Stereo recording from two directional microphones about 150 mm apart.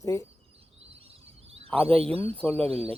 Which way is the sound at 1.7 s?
10° left (ahead or behind).